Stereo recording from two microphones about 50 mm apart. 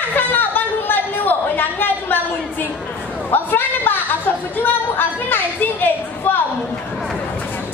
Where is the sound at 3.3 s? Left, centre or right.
Left.